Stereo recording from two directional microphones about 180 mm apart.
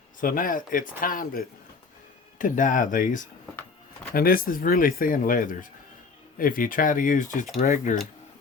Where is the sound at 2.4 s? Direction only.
45° left (ahead or behind).